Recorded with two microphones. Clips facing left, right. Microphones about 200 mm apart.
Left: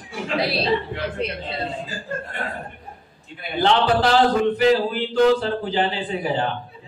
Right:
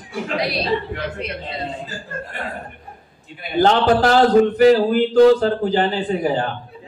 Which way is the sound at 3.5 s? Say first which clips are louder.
Right 4 dB; 45° right (ahead or behind).